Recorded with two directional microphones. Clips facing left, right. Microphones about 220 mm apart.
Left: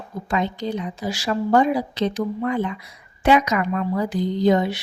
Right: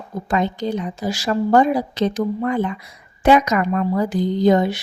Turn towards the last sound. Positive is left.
turn(degrees=-45)  # may be behind; listen again after turning